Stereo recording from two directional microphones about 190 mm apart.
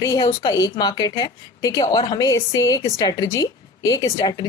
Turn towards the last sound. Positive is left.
turn(degrees=20)  # may be behind; listen again after turning